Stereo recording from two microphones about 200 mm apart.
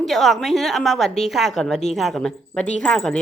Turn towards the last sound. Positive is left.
turn(degrees=5)  # may be behind; listen again after turning